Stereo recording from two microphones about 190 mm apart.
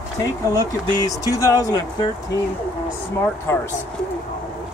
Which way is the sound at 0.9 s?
20° left (ahead or behind).